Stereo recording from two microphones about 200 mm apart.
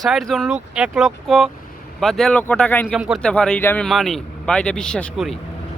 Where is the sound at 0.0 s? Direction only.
Centre (ahead or behind).